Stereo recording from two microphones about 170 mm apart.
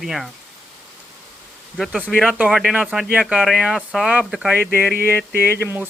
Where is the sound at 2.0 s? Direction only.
5° left (ahead or behind).